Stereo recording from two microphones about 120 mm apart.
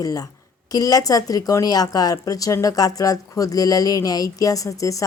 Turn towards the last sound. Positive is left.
turn(degrees=30)  # may be behind; listen again after turning